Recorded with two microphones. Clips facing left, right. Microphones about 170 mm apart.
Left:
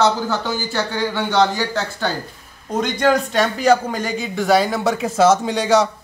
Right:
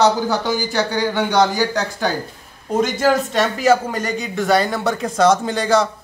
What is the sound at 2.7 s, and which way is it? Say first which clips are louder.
A man's voice: right 1 dB; 5° right (ahead or behind).